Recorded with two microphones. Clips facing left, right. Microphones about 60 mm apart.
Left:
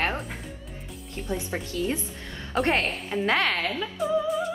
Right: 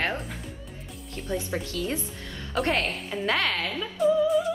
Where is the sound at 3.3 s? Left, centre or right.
Left.